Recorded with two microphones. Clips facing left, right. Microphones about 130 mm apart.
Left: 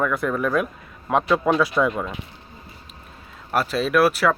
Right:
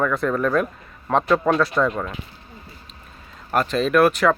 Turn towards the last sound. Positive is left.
turn(degrees=5)  # may be behind; listen again after turning